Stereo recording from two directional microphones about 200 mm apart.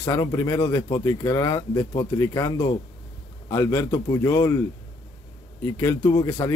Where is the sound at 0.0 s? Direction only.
15° left (ahead or behind).